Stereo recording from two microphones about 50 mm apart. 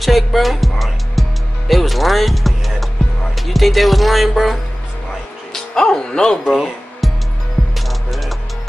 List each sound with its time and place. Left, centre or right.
0.0 s music: centre
1.7 s speech: centre
5.5 s speech: centre
6.4 s music: centre